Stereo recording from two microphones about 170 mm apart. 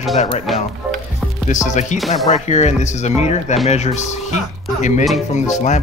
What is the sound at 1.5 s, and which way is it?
Speech, 45° left (ahead or behind).